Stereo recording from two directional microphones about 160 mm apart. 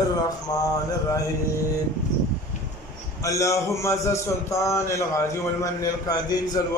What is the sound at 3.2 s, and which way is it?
A man's voice, 20° left (ahead or behind).